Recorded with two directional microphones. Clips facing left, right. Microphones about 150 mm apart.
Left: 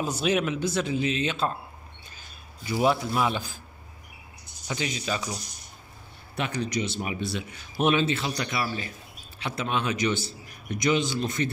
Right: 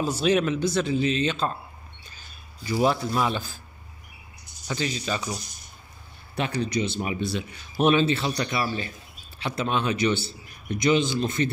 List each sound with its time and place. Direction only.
0.2 s speech: 5° left (ahead or behind)
2.7 s a man's voice: 5° left (ahead or behind)
4.6 s speech: 10° left (ahead or behind)
6.3 s a man's voice: 30° right (ahead or behind)